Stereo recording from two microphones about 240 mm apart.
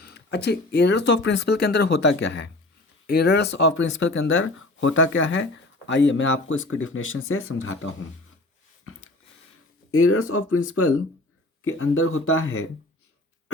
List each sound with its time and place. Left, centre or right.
0.0 s speech: left
8.8 s a sound: left
9.9 s speech: left